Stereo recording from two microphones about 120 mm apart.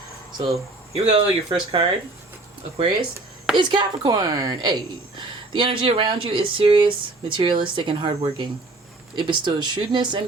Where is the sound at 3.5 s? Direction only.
40° right (ahead or behind).